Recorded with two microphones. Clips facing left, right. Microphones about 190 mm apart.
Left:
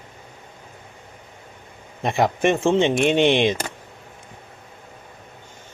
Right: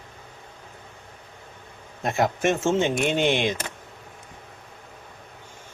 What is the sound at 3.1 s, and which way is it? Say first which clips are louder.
Speech: left 5 dB; 65° left (ahead or behind).